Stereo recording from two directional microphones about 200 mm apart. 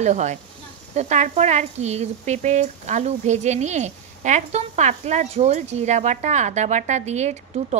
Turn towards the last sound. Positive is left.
turn(degrees=-35)  # may be behind; listen again after turning